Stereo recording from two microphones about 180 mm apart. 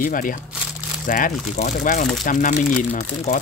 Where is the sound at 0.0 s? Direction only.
50° left (ahead or behind).